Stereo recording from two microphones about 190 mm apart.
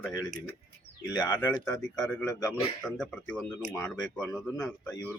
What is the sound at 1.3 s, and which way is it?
Speech, 10° left (ahead or behind).